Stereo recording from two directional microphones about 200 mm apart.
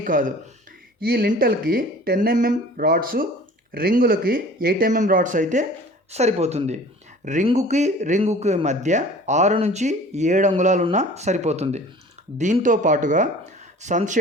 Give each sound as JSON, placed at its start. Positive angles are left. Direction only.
{"t": 0.0, "sound": "speech", "side_deg": -40}